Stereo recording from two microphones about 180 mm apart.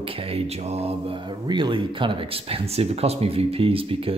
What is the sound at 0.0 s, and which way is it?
Speech, 30° right (ahead or behind).